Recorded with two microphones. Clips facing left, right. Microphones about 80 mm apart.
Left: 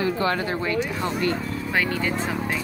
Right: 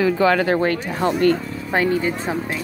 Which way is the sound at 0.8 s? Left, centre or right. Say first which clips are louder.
Right 6 dB; right.